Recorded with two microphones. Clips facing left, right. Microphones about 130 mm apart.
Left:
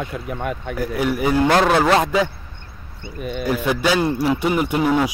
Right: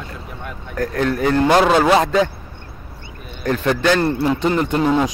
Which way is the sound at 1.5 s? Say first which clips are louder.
Right 3 dB; 15° right (ahead or behind).